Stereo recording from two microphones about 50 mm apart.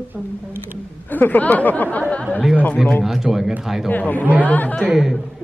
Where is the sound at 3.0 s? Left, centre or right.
Centre.